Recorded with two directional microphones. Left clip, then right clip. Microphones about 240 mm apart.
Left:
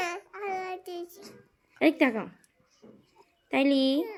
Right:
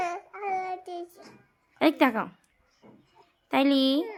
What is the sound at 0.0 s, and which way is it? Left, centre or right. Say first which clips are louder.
Child singing: right 2 dB; centre.